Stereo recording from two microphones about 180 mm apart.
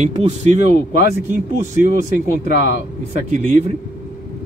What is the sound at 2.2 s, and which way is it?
Speech, 60° left (ahead or behind).